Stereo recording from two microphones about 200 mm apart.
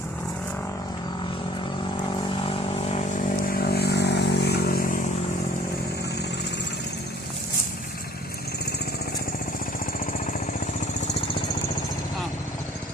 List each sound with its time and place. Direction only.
2.9 s vehicle: 40° left (ahead or behind)